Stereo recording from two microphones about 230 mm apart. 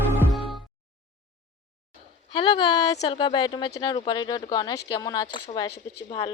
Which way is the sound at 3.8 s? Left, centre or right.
Centre.